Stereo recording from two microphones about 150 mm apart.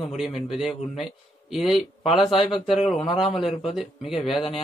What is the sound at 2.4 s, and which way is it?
A man's voice, centre (ahead or behind).